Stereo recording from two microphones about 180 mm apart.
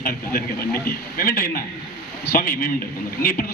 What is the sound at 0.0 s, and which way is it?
Radio, 50° left (ahead or behind).